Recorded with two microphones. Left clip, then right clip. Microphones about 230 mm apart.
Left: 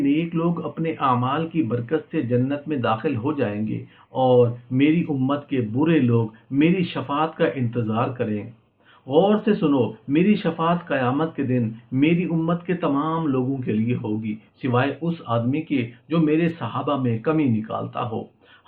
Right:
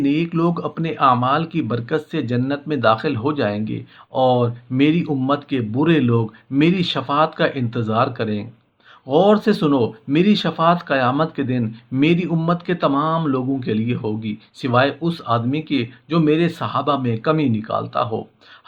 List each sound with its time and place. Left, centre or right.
0.0 s speech: right